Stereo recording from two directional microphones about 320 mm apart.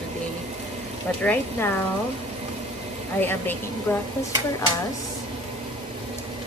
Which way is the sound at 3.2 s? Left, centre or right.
Centre.